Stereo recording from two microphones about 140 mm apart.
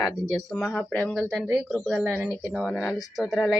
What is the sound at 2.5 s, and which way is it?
Speech, 5° left (ahead or behind).